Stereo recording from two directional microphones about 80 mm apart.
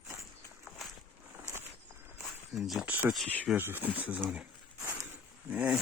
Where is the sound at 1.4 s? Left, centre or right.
Right.